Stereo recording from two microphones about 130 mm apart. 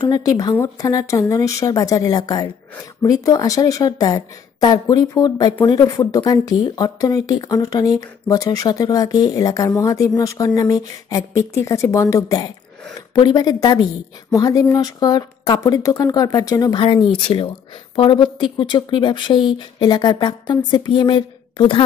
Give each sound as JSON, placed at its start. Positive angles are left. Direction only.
{"t": 0.0, "sound": "speech", "side_deg": 30}
{"t": 16.8, "sound": "speech", "side_deg": 40}